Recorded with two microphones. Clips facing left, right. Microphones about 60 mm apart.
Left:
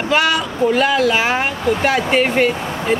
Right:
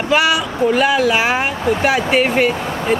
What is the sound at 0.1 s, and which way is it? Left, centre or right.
Speech, centre.